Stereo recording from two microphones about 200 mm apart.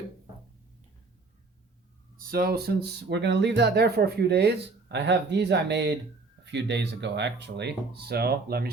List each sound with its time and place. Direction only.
2.1 s speech: 45° right (ahead or behind)